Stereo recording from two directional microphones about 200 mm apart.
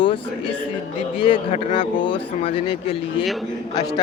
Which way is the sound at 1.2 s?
25° left (ahead or behind).